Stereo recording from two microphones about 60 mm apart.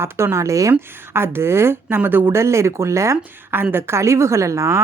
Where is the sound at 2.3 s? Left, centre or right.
Right.